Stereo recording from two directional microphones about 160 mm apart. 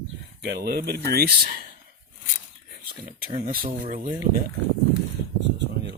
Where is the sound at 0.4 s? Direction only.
85° right; by 1.6 s 70° right (ahead or behind).